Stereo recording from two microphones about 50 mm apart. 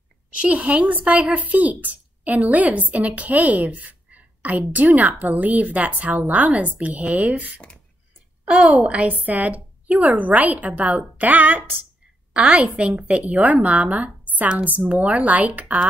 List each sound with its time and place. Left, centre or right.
0.4 s speech: right
8.5 s a woman's voice: centre
8.8 s speech: right
12.4 s speech: right